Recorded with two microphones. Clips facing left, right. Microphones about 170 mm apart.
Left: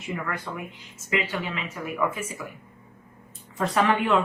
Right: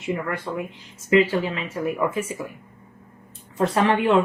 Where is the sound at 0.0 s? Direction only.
25° right (ahead or behind).